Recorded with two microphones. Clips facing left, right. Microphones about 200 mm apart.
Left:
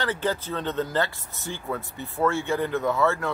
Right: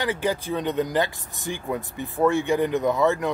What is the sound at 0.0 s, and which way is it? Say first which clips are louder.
Speech: right 2 dB; 15° right (ahead or behind).